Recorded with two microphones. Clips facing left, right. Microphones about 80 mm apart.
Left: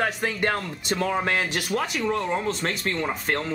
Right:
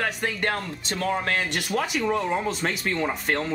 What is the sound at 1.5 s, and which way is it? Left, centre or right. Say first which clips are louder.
Speech: even; centre.